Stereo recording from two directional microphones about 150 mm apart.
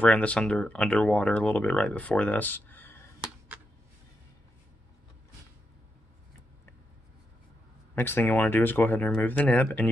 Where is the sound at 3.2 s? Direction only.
10° right (ahead or behind).